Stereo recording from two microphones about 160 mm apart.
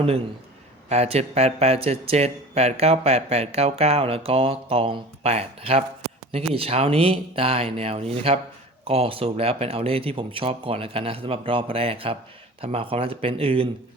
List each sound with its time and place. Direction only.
0.9 s speech: 40° right (ahead or behind)